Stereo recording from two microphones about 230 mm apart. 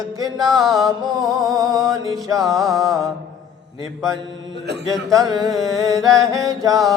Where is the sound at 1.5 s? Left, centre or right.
Centre.